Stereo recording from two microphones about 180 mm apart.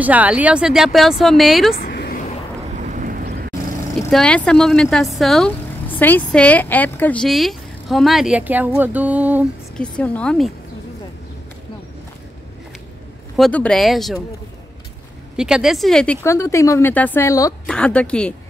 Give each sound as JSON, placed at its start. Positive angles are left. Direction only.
{"t": 0.0, "sound": "speech", "side_deg": -10}
{"t": 1.7, "sound": "a sound", "side_deg": 55}
{"t": 2.7, "sound": "vehicle", "side_deg": -45}
{"t": 4.1, "sound": "speech", "side_deg": 5}
{"t": 9.8, "sound": "speech", "side_deg": 5}
{"t": 13.4, "sound": "speech", "side_deg": 5}
{"t": 15.3, "sound": "speech", "side_deg": -5}
{"t": 17.6, "sound": "speech", "side_deg": 5}